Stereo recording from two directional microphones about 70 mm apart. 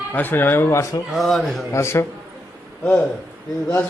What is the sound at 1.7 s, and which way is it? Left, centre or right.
Speech, left.